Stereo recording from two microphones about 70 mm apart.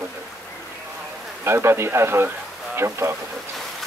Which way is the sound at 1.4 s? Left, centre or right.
Right.